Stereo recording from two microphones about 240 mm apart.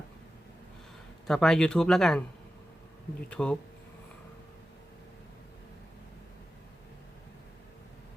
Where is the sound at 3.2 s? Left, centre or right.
Centre.